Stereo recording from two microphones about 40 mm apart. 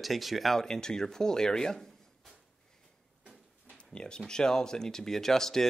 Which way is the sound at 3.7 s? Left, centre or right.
Left.